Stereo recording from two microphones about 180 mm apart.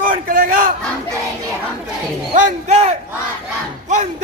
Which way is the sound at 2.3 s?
35° right (ahead or behind).